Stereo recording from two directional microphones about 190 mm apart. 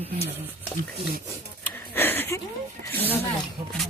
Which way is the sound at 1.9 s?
10° left (ahead or behind).